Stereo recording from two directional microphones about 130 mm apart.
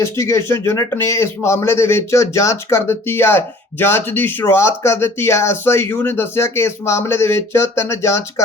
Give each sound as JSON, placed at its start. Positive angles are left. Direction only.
{"t": 0.0, "sound": "speech", "side_deg": 20}